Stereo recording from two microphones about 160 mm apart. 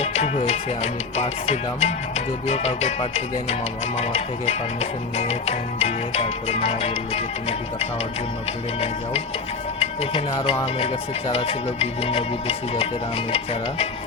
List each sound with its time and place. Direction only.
0.0 s music: 40° left (ahead or behind)
9.8 s speech: 35° left (ahead or behind)
10.8 s music: 35° left (ahead or behind)